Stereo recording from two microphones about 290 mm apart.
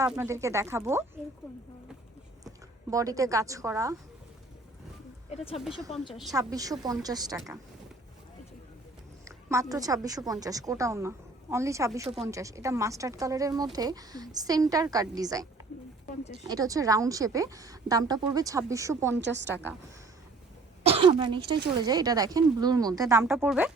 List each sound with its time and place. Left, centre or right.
0.0 s a woman's voice: centre
2.9 s a woman's voice: centre
5.5 s speech: centre
6.3 s a woman's voice: centre
9.2 s a woman's voice: centre
12.0 s speech: right
12.3 s a woman's voice: centre
20.8 s a woman's voice: centre